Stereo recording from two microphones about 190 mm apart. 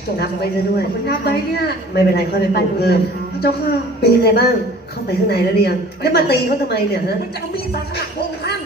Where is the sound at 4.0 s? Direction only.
55° left (ahead or behind).